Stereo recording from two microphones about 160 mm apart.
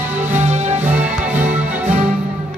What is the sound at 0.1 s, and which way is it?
Music, 10° right (ahead or behind).